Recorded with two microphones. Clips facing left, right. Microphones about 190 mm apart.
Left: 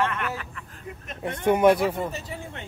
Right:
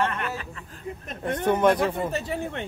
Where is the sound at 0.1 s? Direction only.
30° right (ahead or behind).